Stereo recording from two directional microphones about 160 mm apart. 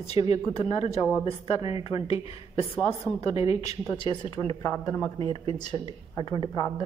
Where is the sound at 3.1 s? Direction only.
15° left (ahead or behind).